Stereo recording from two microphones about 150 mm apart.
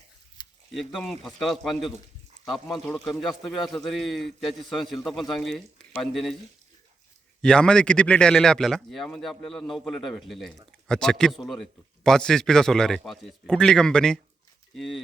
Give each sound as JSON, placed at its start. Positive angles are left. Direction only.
{"t": 0.4, "sound": "a sound", "side_deg": 30}
{"t": 0.9, "sound": "a man's voice", "side_deg": 0}
{"t": 7.4, "sound": "a man's voice", "side_deg": 5}